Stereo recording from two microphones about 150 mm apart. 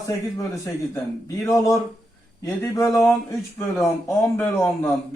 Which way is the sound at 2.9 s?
Centre (ahead or behind).